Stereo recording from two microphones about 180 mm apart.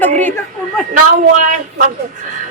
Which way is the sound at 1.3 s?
45° right (ahead or behind).